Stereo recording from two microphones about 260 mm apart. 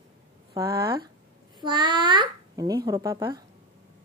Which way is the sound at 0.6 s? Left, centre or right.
Centre.